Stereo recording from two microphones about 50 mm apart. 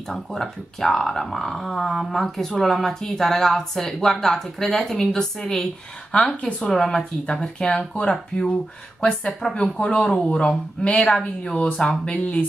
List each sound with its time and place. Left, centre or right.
0.1 s speech: centre
11.5 s speech: left